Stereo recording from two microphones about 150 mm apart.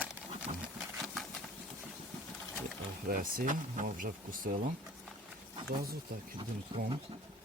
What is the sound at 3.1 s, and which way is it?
Speech, 65° right (ahead or behind).